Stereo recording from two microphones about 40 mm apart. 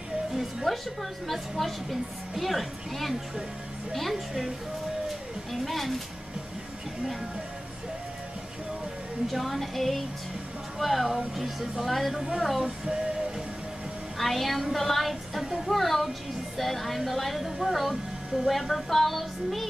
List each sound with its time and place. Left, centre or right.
0.3 s music: centre
1.2 s speech: centre
5.5 s speech: centre
9.3 s speech: centre
12.6 s female singing: centre
14.1 s speech: centre